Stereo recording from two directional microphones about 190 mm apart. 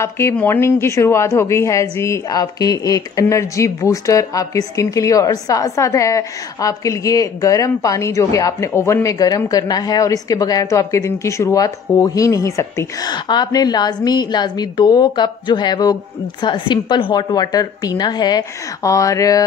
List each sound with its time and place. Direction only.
0.0 s a woman's voice: 10° left (ahead or behind)